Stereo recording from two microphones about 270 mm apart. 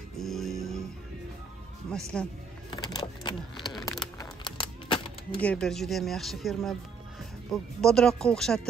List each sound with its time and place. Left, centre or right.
0.2 s music: centre
2.1 s speech: centre
2.7 s a sound: centre
3.5 s a sound: centre
4.2 s typewriter: centre
5.4 s speech: centre